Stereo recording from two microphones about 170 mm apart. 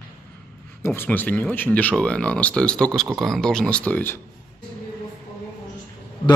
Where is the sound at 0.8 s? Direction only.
15° left (ahead or behind).